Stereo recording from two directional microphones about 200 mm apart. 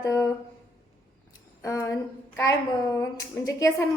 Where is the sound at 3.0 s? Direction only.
15° left (ahead or behind).